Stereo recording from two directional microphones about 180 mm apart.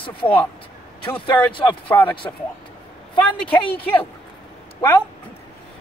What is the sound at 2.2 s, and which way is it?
Speech, 15° left (ahead or behind).